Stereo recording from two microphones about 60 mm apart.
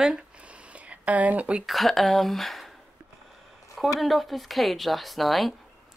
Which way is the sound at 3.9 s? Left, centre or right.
Centre.